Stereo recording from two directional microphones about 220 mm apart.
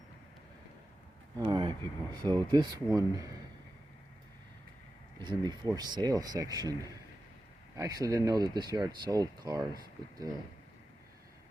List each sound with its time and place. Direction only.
1.5 s speech: 20° right (ahead or behind)
5.2 s speech: 20° right (ahead or behind)
7.8 s speech: 15° right (ahead or behind)